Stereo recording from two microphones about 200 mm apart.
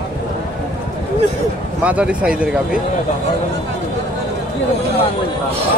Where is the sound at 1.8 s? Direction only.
5° right (ahead or behind).